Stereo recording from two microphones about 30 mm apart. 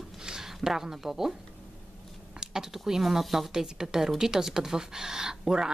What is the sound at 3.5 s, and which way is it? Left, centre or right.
Speech, centre.